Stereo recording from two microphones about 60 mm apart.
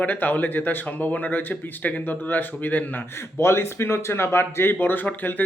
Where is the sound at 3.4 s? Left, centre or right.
Left.